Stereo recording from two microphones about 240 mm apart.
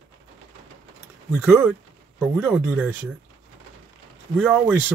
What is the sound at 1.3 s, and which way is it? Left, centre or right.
Speech, centre.